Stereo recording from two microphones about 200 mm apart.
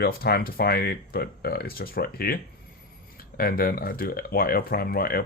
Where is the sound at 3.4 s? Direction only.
50° left (ahead or behind).